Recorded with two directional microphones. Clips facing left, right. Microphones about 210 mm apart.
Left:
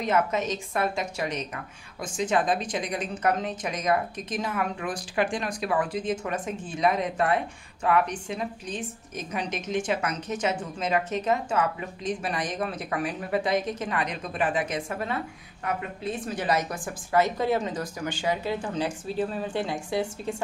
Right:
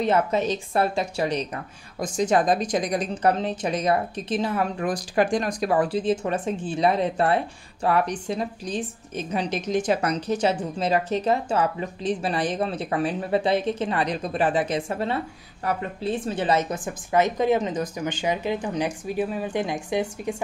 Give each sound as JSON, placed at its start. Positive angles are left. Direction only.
{"t": 0.0, "sound": "a woman's voice", "side_deg": -30}